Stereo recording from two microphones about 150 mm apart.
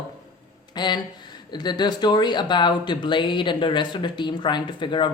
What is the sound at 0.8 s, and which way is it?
Speech, 30° left (ahead or behind).